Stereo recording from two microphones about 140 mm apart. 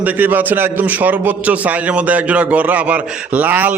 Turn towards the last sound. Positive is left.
turn(degrees=-10)  # may be behind; listen again after turning